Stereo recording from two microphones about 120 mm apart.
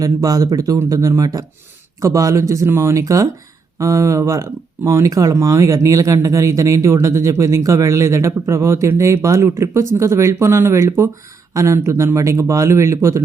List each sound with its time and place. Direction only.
0.0 s speech: 30° right (ahead or behind)